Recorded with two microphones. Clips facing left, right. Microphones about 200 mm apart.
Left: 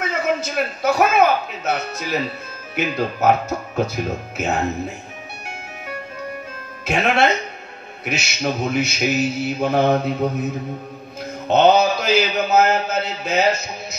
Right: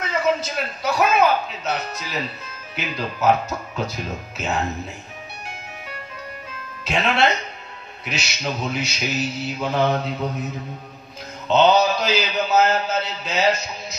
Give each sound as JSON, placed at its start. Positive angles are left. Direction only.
{"t": 0.1, "sound": "a man's voice", "side_deg": 50}
{"t": 2.7, "sound": "mantra", "side_deg": 50}
{"t": 6.8, "sound": "speech", "side_deg": 50}
{"t": 8.0, "sound": "mantra", "side_deg": 50}
{"t": 11.4, "sound": "mantra", "side_deg": 50}